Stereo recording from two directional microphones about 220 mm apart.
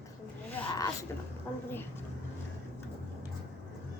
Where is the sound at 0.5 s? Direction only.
15° left (ahead or behind).